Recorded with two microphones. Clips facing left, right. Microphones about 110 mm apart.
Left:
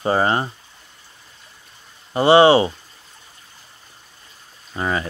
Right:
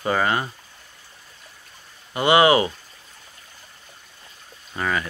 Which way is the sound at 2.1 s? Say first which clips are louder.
Left 4 dB; 30° left (ahead or behind).